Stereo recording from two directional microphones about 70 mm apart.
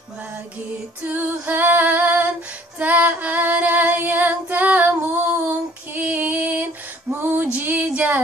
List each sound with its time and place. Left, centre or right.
1.0 s female singing: right